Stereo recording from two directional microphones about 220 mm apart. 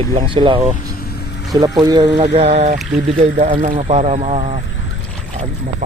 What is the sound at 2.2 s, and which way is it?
Speech, 30° right (ahead or behind).